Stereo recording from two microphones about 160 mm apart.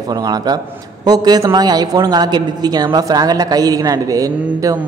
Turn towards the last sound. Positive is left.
turn(degrees=-20)  # may be behind; listen again after turning